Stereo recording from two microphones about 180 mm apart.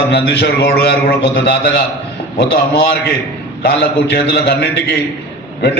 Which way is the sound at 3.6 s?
70° left (ahead or behind).